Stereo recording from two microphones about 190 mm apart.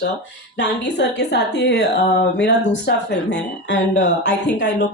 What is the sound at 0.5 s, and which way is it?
Speech, 65° left (ahead or behind).